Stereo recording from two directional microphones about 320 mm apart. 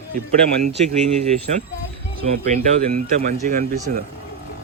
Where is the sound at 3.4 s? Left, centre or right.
Right.